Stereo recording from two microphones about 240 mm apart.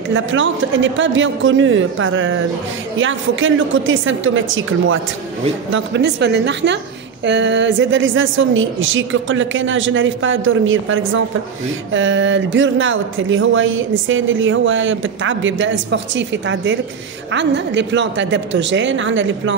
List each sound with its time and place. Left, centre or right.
0.1 s speech: right